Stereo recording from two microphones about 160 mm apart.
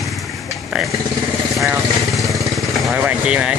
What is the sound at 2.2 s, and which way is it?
Motorcycle, 20° right (ahead or behind).